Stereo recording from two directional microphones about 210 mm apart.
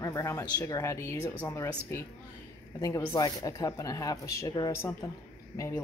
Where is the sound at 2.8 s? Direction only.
15° left (ahead or behind).